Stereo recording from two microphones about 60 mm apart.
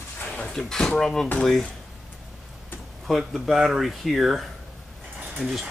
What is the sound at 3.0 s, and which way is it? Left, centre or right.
Speech, centre.